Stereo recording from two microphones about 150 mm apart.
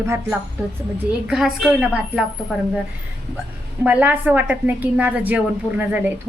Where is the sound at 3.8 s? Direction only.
10° right (ahead or behind).